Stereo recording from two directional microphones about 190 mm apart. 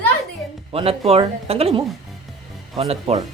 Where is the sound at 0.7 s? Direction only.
30° right (ahead or behind).